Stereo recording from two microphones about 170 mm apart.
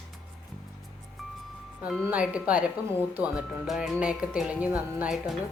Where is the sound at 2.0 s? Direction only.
5° right (ahead or behind).